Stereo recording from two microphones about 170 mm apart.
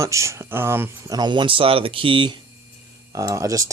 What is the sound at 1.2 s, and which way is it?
Speech, 25° right (ahead or behind).